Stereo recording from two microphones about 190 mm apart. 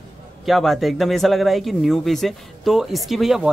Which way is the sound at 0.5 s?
Centre (ahead or behind).